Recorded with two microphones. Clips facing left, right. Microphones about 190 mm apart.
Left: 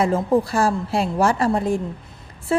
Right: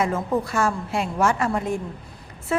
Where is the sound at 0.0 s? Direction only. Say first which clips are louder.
Left 5 dB; 30° left (ahead or behind).